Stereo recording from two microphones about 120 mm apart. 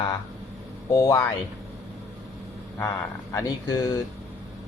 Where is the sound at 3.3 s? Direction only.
30° left (ahead or behind).